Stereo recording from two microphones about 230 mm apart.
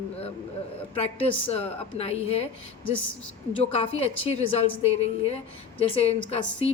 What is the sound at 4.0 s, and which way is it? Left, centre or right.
Speech, left.